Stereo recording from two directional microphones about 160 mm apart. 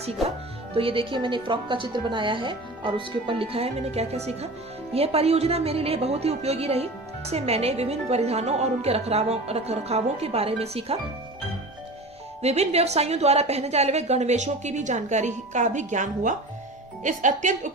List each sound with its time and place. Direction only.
0.7 s a woman's voice: 35° right (ahead or behind)
12.4 s a woman's voice: 40° right (ahead or behind)